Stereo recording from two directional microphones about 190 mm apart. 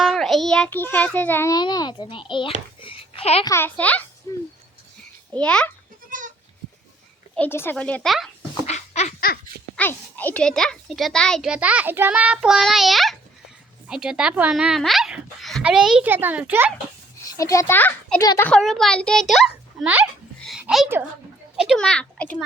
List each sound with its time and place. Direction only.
0.0 s a child's voice: centre (ahead or behind); by 3.4 s 30° left (ahead or behind)
3.4 s a child's voice: 15° left (ahead or behind)
4.3 s a sound: 20° left (ahead or behind)
5.3 s a child's voice: 5° left (ahead or behind)
6.1 s goat: 45° right (ahead or behind)
7.3 s a child's voice: 10° left (ahead or behind)
8.6 s a sound: 35° left (ahead or behind)
9.7 s a child's voice: 10° left (ahead or behind); by 16.7 s 10° right (ahead or behind)
17.3 s a child's voice: 15° left (ahead or behind)
18.5 s a child's voice: centre (ahead or behind)
20.4 s a sound: centre (ahead or behind)
21.6 s a child's voice: centre (ahead or behind)